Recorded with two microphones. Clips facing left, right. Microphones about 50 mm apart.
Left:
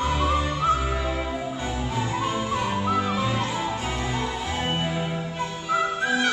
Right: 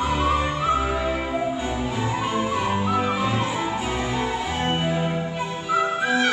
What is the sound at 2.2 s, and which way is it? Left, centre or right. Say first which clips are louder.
Music: right 2 dB; centre.